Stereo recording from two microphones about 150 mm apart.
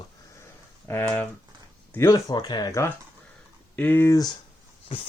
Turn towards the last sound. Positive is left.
turn(degrees=25)  # may be behind; listen again after turning